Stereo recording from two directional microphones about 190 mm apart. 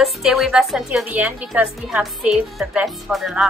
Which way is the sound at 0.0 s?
Centre (ahead or behind).